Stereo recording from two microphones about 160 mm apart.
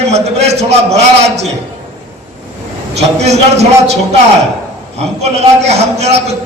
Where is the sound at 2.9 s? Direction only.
45° right (ahead or behind).